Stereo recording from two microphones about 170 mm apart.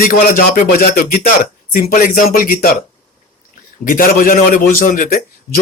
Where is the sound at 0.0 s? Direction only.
55° left (ahead or behind).